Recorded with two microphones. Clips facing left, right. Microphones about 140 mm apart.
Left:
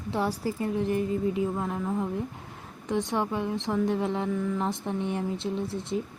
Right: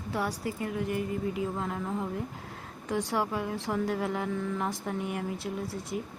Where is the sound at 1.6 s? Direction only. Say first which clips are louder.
Left 3 dB; 15° left (ahead or behind).